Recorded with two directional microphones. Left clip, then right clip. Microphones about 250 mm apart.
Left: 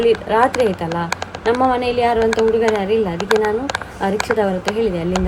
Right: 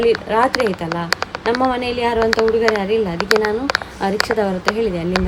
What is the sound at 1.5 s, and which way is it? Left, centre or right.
A woman's voice, centre.